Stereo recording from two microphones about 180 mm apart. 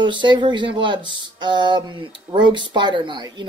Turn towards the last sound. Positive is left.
turn(degrees=-25)  # may be behind; listen again after turning